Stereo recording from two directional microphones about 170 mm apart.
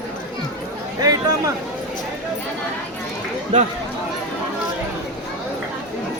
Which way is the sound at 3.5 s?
45° right (ahead or behind).